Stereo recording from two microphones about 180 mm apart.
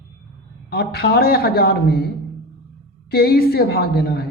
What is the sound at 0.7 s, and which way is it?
A man's voice, 60° left (ahead or behind).